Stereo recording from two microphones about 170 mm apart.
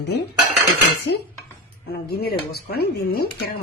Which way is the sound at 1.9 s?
65° left (ahead or behind).